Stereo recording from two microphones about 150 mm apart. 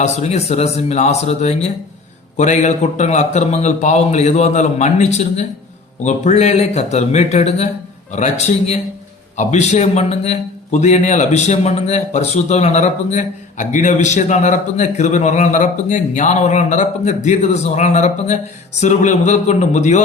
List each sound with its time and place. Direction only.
0.0 s a man's voice: 50° left (ahead or behind)